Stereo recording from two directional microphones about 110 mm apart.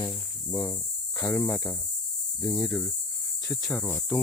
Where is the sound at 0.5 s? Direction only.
20° left (ahead or behind).